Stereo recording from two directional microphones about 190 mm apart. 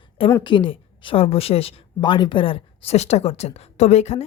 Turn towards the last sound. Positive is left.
turn(degrees=35)  # may be behind; listen again after turning